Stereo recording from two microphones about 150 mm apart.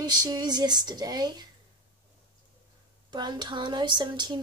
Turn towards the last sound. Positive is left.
turn(degrees=-30)  # may be behind; listen again after turning